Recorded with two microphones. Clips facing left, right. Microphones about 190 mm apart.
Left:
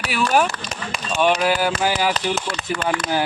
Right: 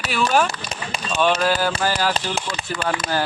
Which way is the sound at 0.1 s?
15° left (ahead or behind).